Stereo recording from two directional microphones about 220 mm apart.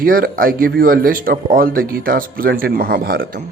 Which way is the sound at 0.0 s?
40° right (ahead or behind).